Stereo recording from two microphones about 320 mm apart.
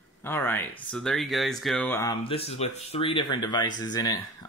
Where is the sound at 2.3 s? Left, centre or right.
Centre.